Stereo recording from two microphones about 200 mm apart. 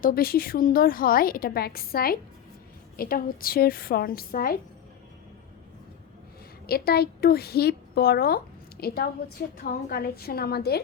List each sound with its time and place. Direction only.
0.0 s a woman's voice: 50° left (ahead or behind)
6.7 s a woman's voice: 50° left (ahead or behind)